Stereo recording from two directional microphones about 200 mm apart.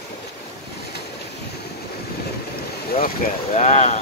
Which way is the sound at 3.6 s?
35° left (ahead or behind).